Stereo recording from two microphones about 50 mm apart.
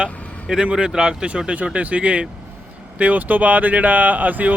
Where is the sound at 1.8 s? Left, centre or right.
Right.